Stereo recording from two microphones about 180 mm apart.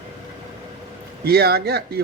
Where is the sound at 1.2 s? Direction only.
60° right (ahead or behind).